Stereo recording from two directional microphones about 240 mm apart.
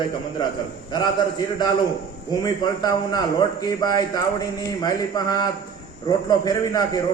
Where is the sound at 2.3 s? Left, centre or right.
Centre.